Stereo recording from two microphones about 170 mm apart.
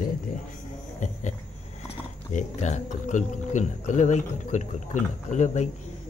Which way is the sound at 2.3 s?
45° left (ahead or behind).